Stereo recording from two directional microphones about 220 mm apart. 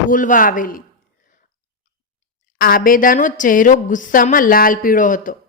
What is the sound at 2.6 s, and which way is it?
A woman's voice, 40° left (ahead or behind).